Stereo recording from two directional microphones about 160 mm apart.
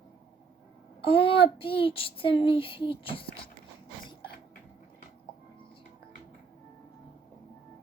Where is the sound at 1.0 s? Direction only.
35° left (ahead or behind).